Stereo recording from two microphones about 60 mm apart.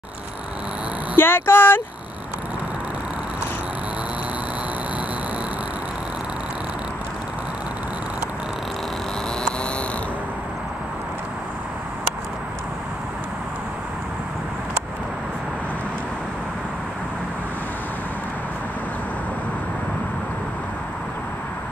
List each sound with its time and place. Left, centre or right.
1.1 s speech: left